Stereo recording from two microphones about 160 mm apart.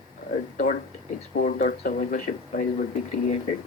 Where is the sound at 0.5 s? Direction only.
55° left (ahead or behind).